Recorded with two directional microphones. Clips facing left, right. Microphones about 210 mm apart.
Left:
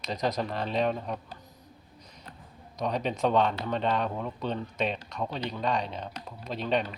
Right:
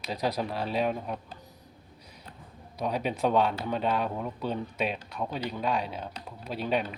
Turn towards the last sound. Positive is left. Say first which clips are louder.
# even
turn(degrees=-5)  # may be behind; listen again after turning